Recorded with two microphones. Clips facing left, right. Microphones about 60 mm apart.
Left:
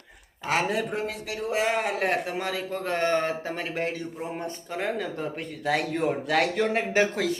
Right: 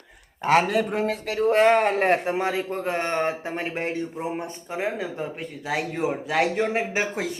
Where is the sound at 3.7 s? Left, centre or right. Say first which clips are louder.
Right 1 dB; right.